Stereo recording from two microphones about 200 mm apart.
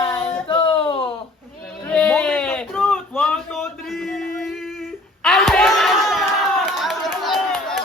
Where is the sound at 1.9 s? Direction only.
5° left (ahead or behind).